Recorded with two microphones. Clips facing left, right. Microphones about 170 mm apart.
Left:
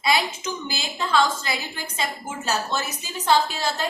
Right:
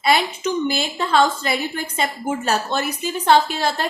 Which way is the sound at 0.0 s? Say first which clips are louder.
Right 4 dB; 55° right (ahead or behind).